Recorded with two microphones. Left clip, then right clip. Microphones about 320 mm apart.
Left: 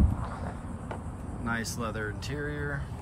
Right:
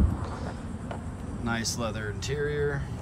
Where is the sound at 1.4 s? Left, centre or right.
Centre.